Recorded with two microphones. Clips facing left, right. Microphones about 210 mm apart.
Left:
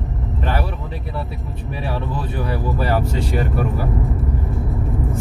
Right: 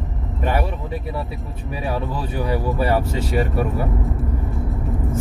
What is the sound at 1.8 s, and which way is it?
Speech, centre (ahead or behind).